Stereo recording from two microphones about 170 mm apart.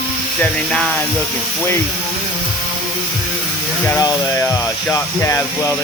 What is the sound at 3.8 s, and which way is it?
Speech, 20° left (ahead or behind).